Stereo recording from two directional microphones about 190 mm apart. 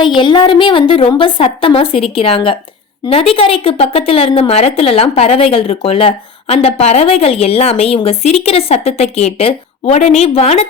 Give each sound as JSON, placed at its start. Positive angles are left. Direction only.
{"t": 0.2, "sound": "a woman's voice", "side_deg": 25}